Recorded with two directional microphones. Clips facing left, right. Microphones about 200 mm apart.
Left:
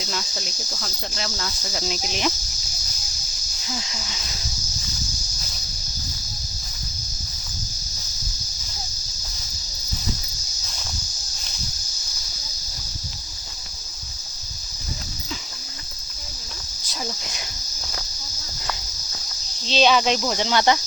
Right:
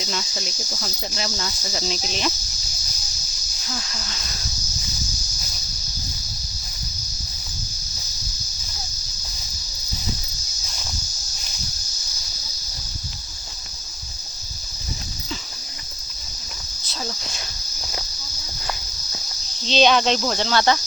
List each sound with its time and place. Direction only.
0.0 s speech: centre (ahead or behind); by 2.3 s 15° left (ahead or behind)
3.7 s speech: 10° left (ahead or behind)
16.9 s speech: 15° left (ahead or behind)
19.6 s speech: 5° left (ahead or behind)